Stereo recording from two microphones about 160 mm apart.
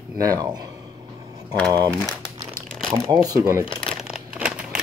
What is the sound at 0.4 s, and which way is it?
Speech, 25° right (ahead or behind).